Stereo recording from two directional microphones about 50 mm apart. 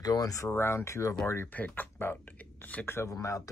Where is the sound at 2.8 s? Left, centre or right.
Left.